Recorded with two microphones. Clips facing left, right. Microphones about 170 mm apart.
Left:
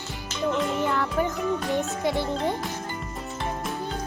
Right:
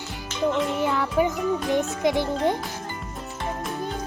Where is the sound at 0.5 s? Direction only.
5° right (ahead or behind).